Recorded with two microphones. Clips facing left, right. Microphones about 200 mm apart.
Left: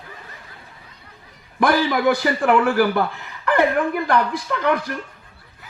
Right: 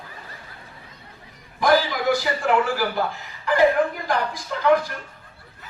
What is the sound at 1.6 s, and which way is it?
A man's voice, 60° left (ahead or behind).